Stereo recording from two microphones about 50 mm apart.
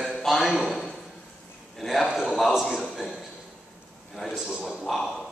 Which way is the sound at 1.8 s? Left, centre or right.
Centre.